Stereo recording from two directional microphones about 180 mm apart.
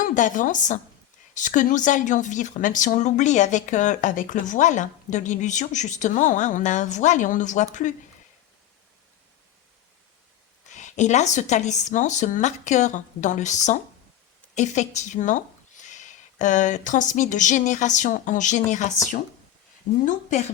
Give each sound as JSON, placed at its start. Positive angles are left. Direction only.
{"t": 0.0, "sound": "a woman's voice", "side_deg": 45}
{"t": 10.7, "sound": "a woman's voice", "side_deg": 40}